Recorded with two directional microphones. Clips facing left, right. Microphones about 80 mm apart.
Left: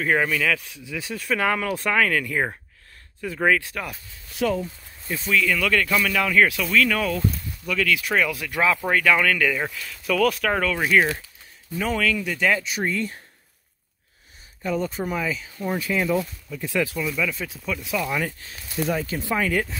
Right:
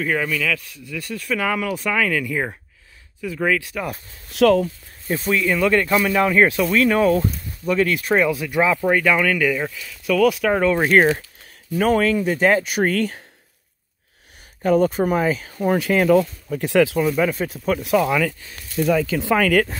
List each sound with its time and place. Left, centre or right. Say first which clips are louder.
0.0 s speech: even; centre
0.6 s speech: right 1 dB; centre
3.4 s speech: left 1 dB; centre
4.3 s speech: right 9 dB; right
5.1 s speech: right 3 dB; right
5.4 s speech: right 5 dB; right
8.8 s speech: right 2 dB; centre
10.6 s speech: right 6 dB; right
10.9 s speech: right 3 dB; right
12.0 s speech: right 5 dB; right
12.6 s speech: right 6 dB; right
14.6 s speech: right 9 dB; right
17.0 s speech: right 7 dB; right
19.1 s speech: right 6 dB; right